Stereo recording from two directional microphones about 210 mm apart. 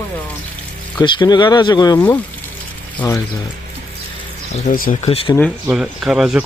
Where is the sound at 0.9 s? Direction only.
20° left (ahead or behind).